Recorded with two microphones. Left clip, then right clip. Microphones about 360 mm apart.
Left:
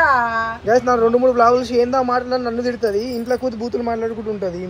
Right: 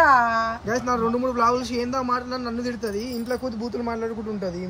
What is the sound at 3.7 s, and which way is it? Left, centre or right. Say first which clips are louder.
Speech: left 6 dB; left.